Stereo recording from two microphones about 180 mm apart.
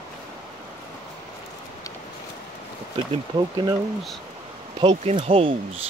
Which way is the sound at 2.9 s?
30° right (ahead or behind).